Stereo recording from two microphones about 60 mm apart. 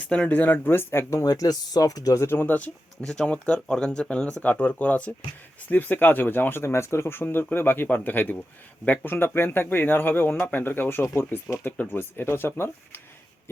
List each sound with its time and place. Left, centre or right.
0.0 s speech: centre
0.3 s speech: left
1.1 s speech: left
2.1 s speech: left
3.0 s speech: centre
4.4 s speech: left
8.8 s speech: centre
9.0 s speech: left